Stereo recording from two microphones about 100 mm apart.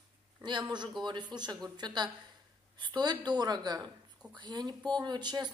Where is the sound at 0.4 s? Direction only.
45° right (ahead or behind).